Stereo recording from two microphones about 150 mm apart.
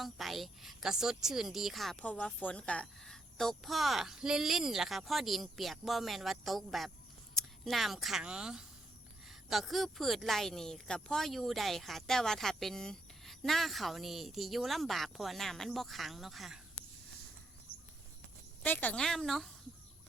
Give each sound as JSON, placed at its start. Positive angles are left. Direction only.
{"t": 0.0, "sound": "speech", "side_deg": 0}
{"t": 17.7, "sound": "a sound", "side_deg": 85}
{"t": 18.6, "sound": "speech", "side_deg": 10}